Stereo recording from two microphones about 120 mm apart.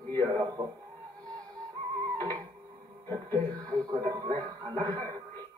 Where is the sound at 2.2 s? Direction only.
30° right (ahead or behind).